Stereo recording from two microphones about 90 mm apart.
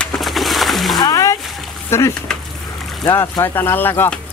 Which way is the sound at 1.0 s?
45° left (ahead or behind).